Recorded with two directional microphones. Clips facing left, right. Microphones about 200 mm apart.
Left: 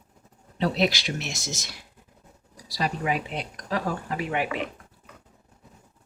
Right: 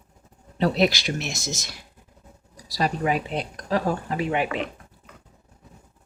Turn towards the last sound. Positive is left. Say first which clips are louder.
# right 3 dB
turn(degrees=-25)  # may be behind; listen again after turning